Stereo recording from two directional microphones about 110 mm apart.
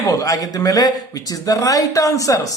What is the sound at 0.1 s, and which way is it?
Speech, 35° left (ahead or behind).